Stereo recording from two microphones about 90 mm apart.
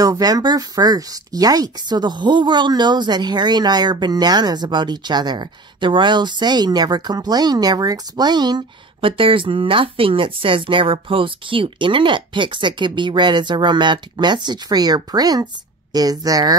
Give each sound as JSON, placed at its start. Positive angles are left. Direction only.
{"t": 0.0, "sound": "speech", "side_deg": -45}
{"t": 9.0, "sound": "speech", "side_deg": -80}